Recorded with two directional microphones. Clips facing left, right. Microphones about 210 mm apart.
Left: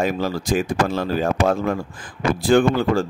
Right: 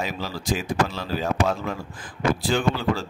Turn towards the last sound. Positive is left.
turn(degrees=50)  # may be behind; listen again after turning